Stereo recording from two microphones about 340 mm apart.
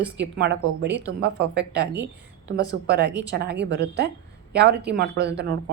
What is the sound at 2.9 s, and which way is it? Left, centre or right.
A woman's voice, right.